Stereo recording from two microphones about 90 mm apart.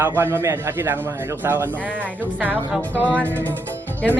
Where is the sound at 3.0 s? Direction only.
20° right (ahead or behind).